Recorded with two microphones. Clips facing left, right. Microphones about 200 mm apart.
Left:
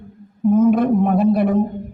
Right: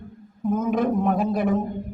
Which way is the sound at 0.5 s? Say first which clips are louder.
Left 8 dB; 45° right (ahead or behind).